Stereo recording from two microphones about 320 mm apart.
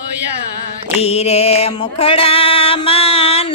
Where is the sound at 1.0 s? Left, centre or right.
Centre.